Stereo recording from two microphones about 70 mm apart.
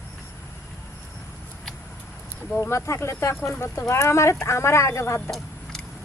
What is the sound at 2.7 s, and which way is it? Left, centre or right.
Speech, left.